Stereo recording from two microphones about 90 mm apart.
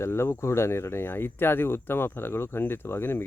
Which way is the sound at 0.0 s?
30° left (ahead or behind).